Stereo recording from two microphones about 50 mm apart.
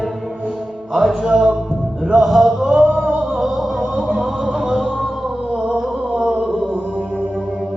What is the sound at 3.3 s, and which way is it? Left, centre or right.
Music, centre.